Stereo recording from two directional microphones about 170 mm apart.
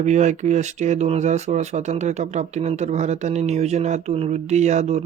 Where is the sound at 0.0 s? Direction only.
45° right (ahead or behind).